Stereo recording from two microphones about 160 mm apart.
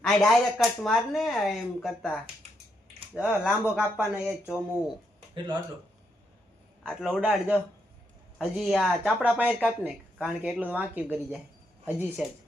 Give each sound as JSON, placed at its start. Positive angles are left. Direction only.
{"t": 0.0, "sound": "speech", "side_deg": 0}
{"t": 5.3, "sound": "speech", "side_deg": -25}
{"t": 6.8, "sound": "speech", "side_deg": -5}